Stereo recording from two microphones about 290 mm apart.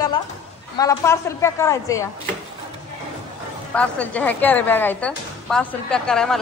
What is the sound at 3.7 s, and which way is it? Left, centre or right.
A woman's voice, centre.